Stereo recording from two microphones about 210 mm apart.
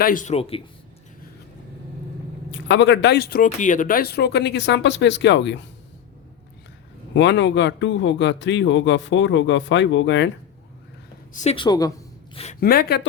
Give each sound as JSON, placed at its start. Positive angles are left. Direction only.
{"t": 0.0, "sound": "speech", "side_deg": 40}
{"t": 2.5, "sound": "a man's voice", "side_deg": 60}
{"t": 7.1, "sound": "a man's voice", "side_deg": 60}
{"t": 11.4, "sound": "a woman's voice", "side_deg": 25}
{"t": 12.5, "sound": "speech", "side_deg": 45}